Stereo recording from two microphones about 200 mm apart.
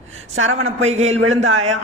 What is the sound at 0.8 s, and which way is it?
Speech, 35° right (ahead or behind).